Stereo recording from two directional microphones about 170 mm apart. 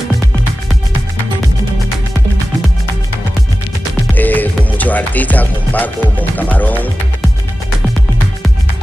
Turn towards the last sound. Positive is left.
turn(degrees=10)  # may be behind; listen again after turning